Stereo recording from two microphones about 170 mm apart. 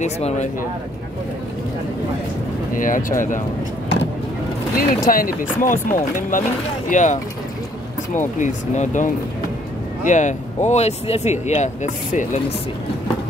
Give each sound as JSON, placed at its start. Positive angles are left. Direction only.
{"t": 0.0, "sound": "speech", "side_deg": 45}
{"t": 2.7, "sound": "speech", "side_deg": 50}
{"t": 4.7, "sound": "speech", "side_deg": 55}
{"t": 8.4, "sound": "speech", "side_deg": 45}